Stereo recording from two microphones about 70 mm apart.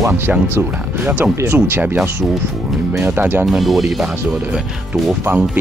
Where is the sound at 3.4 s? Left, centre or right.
Centre.